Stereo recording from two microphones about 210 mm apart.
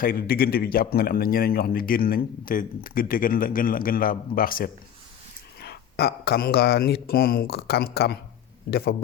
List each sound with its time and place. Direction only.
0.0 s speech: 45° left (ahead or behind)